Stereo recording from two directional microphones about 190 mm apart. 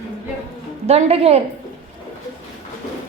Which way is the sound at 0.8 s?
35° right (ahead or behind).